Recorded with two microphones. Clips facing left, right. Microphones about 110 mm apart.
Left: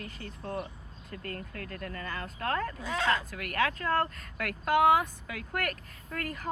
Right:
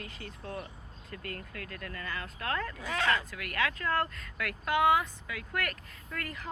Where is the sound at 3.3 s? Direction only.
45° left (ahead or behind).